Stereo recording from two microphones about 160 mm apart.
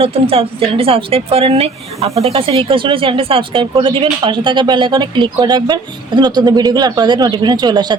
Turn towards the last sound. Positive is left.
turn(degrees=-25)  # may be behind; listen again after turning